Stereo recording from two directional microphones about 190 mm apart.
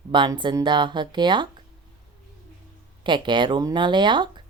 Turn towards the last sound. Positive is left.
turn(degrees=-25)  # may be behind; listen again after turning